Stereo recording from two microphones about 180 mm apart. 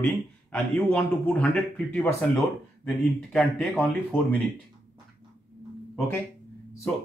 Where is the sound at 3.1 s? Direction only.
5° left (ahead or behind).